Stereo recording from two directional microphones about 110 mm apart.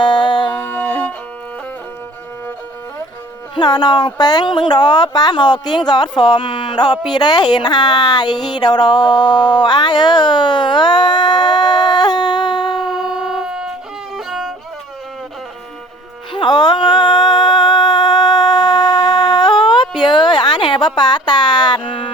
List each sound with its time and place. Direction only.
0.0 s music: 45° left (ahead or behind)
0.7 s music: 15° left (ahead or behind)
3.5 s speech: 40° left (ahead or behind)
12.7 s a sound: centre (ahead or behind)
14.2 s violin: centre (ahead or behind)
16.3 s a sound: 45° left (ahead or behind)